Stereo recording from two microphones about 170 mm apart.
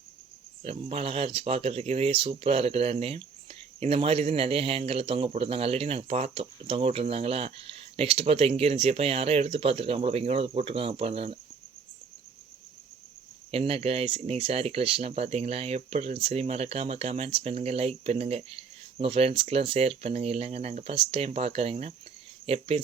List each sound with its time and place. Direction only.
0.6 s speech: 35° right (ahead or behind)
13.5 s speech: 35° right (ahead or behind)